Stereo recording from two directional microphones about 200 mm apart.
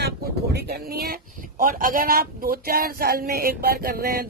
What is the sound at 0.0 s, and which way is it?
Speech, 55° right (ahead or behind).